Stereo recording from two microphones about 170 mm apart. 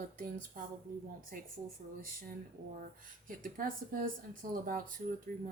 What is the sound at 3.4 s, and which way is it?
Speech, 55° right (ahead or behind).